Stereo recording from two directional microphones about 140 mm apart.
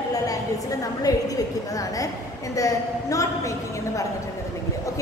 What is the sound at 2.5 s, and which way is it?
Speech, 25° left (ahead or behind).